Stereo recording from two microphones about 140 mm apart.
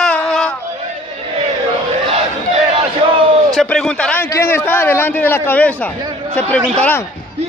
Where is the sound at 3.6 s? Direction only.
5° left (ahead or behind).